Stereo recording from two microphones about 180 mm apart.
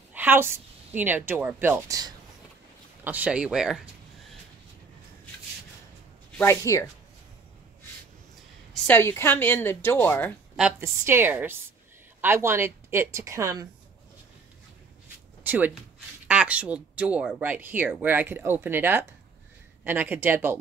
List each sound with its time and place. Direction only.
0.1 s a sound: 10° right (ahead or behind)
0.9 s speech: 10° right (ahead or behind)
3.0 s speech: 10° right (ahead or behind)
6.4 s a woman's voice: 15° left (ahead or behind)
8.8 s a woman's voice: 10° left (ahead or behind)
10.8 s speech: 10° right (ahead or behind)
15.4 s a sound: 10° right (ahead or behind)
16.3 s speech: 5° right (ahead or behind)